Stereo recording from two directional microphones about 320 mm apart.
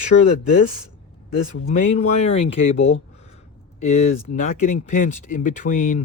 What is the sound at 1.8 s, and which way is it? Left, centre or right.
Speech, centre.